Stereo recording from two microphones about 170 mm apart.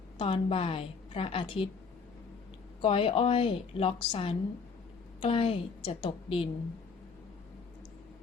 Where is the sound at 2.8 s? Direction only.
30° left (ahead or behind).